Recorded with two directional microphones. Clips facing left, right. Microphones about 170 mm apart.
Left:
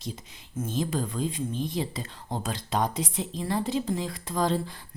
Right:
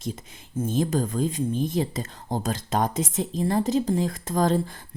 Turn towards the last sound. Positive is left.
turn(degrees=-45)  # may be behind; listen again after turning